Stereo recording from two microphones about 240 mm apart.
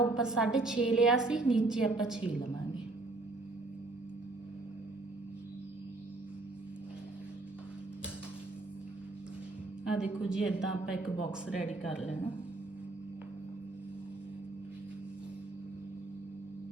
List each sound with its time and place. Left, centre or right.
0.1 s a woman's voice: centre
9.8 s a woman's voice: centre